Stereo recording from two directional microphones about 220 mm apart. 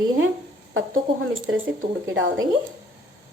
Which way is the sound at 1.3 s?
60° right (ahead or behind).